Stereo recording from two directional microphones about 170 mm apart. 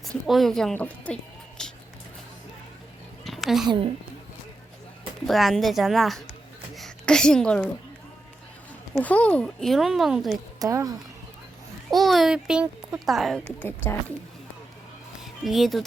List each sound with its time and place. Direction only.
0.3 s a woman's voice: centre (ahead or behind)
3.2 s a sound: centre (ahead or behind)
5.2 s a child's voice: centre (ahead or behind)
9.0 s a child's voice: 10° left (ahead or behind)
10.6 s speech: 20° right (ahead or behind)
11.9 s a child's voice: centre (ahead or behind)
13.6 s speech: 10° left (ahead or behind)
15.2 s a sound: centre (ahead or behind)